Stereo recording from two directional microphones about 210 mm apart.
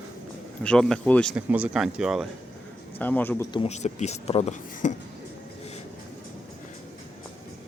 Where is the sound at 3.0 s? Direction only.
10° left (ahead or behind).